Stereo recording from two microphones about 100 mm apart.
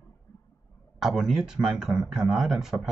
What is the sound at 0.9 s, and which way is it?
Speech, 5° right (ahead or behind).